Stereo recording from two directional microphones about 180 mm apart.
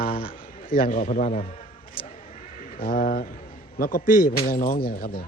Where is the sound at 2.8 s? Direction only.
50° left (ahead or behind).